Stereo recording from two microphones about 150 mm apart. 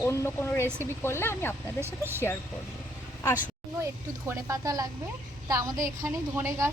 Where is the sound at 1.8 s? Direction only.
15° right (ahead or behind).